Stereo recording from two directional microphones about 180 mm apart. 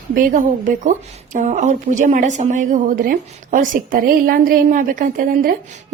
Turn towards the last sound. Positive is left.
turn(degrees=-55)  # may be behind; listen again after turning